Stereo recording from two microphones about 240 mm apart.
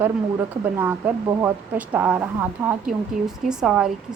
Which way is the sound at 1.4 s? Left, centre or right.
Centre.